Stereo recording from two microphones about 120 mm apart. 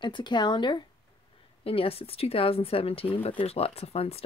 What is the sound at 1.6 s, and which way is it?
Speech, 50° left (ahead or behind).